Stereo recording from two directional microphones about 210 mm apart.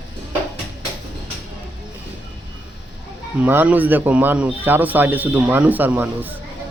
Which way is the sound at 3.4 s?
10° right (ahead or behind).